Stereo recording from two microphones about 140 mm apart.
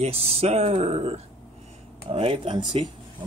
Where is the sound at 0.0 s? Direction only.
45° right (ahead or behind).